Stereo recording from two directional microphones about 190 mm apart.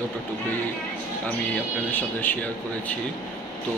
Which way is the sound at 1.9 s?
10° left (ahead or behind).